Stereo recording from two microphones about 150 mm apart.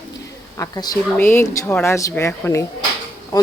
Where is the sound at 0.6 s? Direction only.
25° left (ahead or behind).